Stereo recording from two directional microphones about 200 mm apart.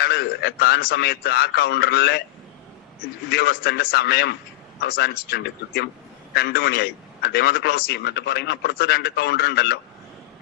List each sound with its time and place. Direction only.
0.0 s a man's voice: 55° left (ahead or behind)
3.2 s a man's voice: 55° left (ahead or behind)